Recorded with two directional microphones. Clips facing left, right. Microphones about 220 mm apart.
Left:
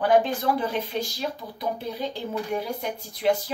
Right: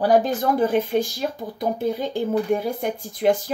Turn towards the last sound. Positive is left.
turn(degrees=-50)  # may be behind; listen again after turning